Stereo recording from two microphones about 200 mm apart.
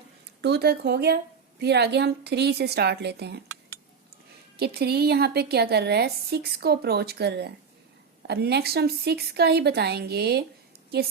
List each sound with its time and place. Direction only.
0.4 s a woman's voice: 55° right (ahead or behind)
4.5 s a woman's voice: 50° right (ahead or behind)